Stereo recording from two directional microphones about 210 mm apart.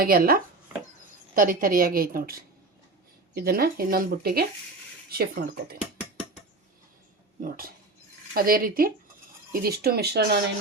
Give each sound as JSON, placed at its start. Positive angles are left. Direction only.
{"t": 0.0, "sound": "speech", "side_deg": -45}
{"t": 7.4, "sound": "speech", "side_deg": -45}